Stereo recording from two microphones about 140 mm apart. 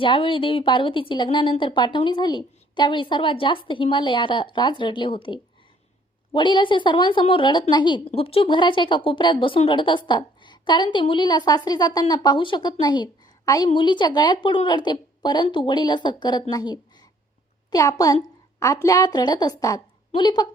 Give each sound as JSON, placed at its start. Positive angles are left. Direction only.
{"t": 0.0, "sound": "a woman's voice", "side_deg": 40}